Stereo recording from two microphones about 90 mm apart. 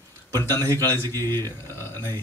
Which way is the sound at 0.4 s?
30° left (ahead or behind).